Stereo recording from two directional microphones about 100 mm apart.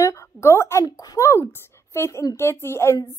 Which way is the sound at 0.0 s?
30° left (ahead or behind).